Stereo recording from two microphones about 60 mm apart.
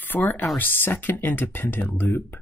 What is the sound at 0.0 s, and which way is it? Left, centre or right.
Speech, left.